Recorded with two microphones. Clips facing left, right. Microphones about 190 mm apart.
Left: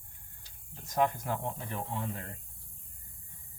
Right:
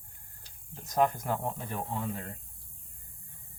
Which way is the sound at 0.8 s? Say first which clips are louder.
Right 2 dB; 40° right (ahead or behind).